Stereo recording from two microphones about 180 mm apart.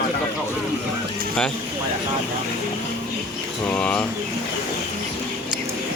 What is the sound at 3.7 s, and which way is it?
Speech, 5° left (ahead or behind).